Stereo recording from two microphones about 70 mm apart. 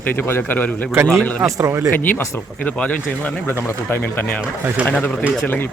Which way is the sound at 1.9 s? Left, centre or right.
Left.